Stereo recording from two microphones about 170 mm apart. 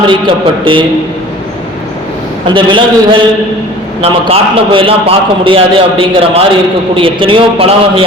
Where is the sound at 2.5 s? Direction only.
30° right (ahead or behind).